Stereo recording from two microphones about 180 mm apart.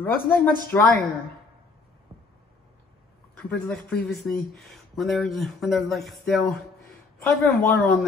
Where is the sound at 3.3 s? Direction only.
5° left (ahead or behind).